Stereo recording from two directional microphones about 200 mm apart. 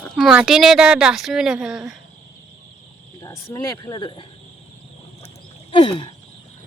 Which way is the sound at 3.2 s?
15° left (ahead or behind).